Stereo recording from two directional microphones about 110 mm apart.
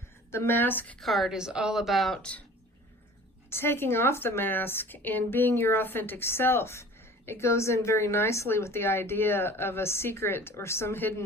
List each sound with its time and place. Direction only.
0.3 s a woman's voice: 20° left (ahead or behind)
0.9 s speech: centre (ahead or behind)
3.5 s a woman's voice: 20° left (ahead or behind)